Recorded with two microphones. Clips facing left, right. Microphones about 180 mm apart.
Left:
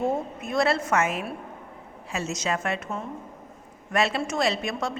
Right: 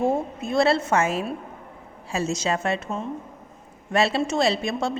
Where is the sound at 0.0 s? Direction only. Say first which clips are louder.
Right 3 dB; 25° right (ahead or behind).